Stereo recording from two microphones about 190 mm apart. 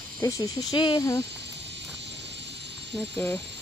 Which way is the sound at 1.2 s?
65° right (ahead or behind).